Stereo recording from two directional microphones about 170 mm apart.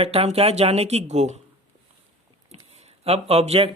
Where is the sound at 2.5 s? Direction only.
40° right (ahead or behind).